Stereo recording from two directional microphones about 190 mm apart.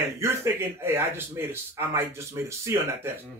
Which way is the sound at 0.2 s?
15° right (ahead or behind).